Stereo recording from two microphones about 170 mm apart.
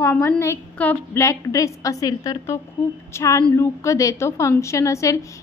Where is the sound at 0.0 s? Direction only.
15° left (ahead or behind).